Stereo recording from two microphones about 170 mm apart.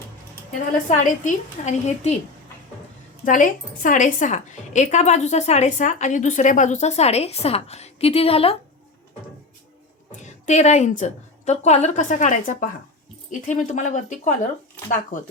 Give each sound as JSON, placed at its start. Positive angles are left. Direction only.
{"t": 0.9, "sound": "a woman's voice", "side_deg": 45}
{"t": 3.2, "sound": "a woman's voice", "side_deg": 50}
{"t": 10.2, "sound": "a woman's voice", "side_deg": 45}